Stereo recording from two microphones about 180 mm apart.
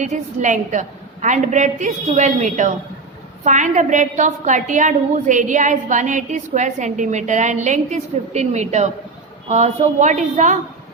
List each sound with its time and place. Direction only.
0.0 s a woman's voice: 45° right (ahead or behind)